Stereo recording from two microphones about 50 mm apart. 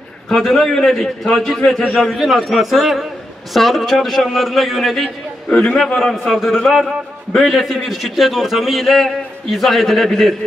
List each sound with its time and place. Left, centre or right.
0.3 s a man's voice: centre
5.5 s a man's voice: centre
5.9 s a man's voice: centre